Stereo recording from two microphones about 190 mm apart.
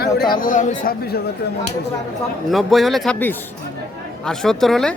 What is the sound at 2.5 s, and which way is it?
Speech, centre (ahead or behind).